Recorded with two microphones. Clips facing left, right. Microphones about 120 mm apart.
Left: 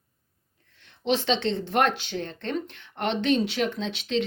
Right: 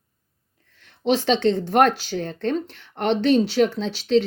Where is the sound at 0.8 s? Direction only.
40° right (ahead or behind).